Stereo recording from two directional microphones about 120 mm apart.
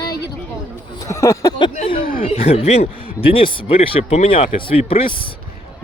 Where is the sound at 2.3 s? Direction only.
55° left (ahead or behind).